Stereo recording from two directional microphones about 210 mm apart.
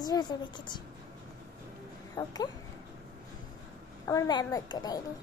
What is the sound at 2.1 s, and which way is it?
Speech, 20° left (ahead or behind).